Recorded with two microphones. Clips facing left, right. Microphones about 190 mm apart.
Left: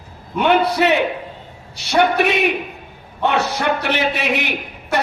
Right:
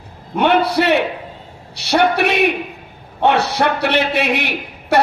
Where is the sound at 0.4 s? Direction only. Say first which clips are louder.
Right 1 dB; 70° right (ahead or behind).